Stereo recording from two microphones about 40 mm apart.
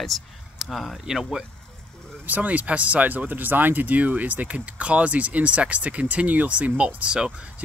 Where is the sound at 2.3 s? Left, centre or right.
Right.